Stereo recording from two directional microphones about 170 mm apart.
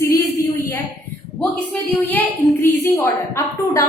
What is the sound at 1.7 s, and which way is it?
A woman's voice, 10° left (ahead or behind).